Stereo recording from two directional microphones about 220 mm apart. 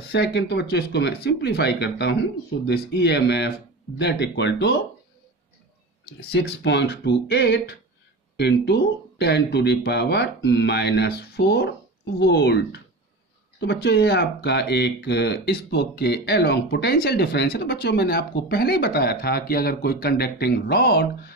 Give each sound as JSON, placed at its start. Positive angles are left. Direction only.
{"t": 0.1, "sound": "speech", "side_deg": 50}
{"t": 6.3, "sound": "speech", "side_deg": 50}